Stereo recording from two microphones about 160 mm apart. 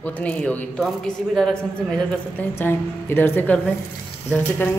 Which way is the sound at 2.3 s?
15° left (ahead or behind).